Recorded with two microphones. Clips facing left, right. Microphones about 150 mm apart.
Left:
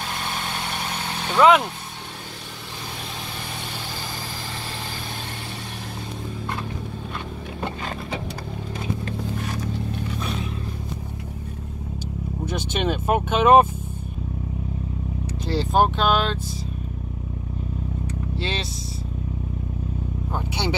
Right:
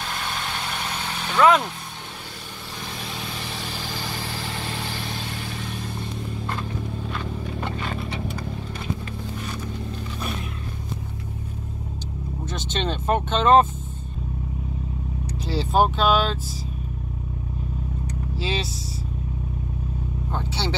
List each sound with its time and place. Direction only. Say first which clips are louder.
1.3 s speech: left 2 dB; 15° left (ahead or behind)
12.4 s speech: left 3 dB; 10° left (ahead or behind)
15.4 s speech: left 1 dB; centre (ahead or behind)
18.3 s speech: right 2 dB; 5° right (ahead or behind)
20.3 s vehicle: left 2 dB; 15° left (ahead or behind)